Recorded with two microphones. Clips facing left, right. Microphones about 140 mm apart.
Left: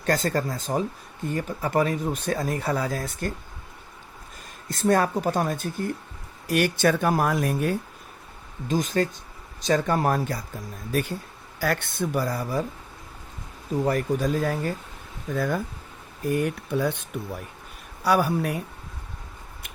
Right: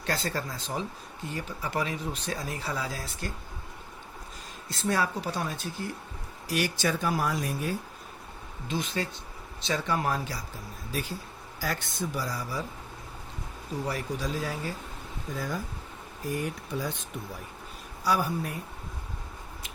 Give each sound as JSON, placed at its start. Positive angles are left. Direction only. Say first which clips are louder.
{"t": 0.0, "sound": "speech", "louder": "left 7 dB", "side_deg": 45}
{"t": 4.7, "sound": "speech", "louder": "left 7 dB", "side_deg": 50}
{"t": 8.6, "sound": "speech", "louder": "left 8 dB", "side_deg": 45}
{"t": 11.6, "sound": "speech", "louder": "left 6 dB", "side_deg": 60}
{"t": 13.8, "sound": "speech", "louder": "left 9 dB", "side_deg": 50}
{"t": 15.4, "sound": "speech", "louder": "left 8 dB", "side_deg": 60}
{"t": 18.0, "sound": "speech", "louder": "left 6 dB", "side_deg": 65}